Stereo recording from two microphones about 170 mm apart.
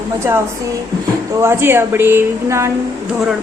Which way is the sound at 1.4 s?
15° right (ahead or behind).